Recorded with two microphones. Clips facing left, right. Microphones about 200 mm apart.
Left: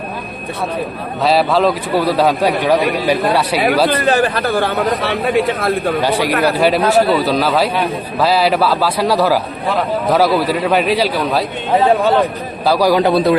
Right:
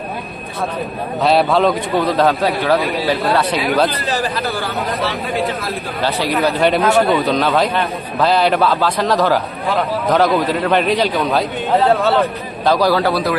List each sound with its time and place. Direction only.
1.2 s a man's voice: centre (ahead or behind)
4.0 s speech: 55° left (ahead or behind)
6.0 s a man's voice: 10° left (ahead or behind)
6.8 s a man's voice: 35° left (ahead or behind)
7.2 s a man's voice: 5° left (ahead or behind)
11.8 s a man's voice: 15° left (ahead or behind)